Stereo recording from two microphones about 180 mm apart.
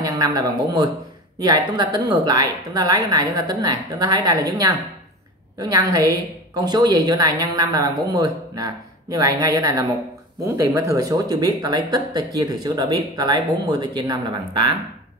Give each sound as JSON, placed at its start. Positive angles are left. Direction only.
{"t": 0.0, "sound": "a woman's voice", "side_deg": -20}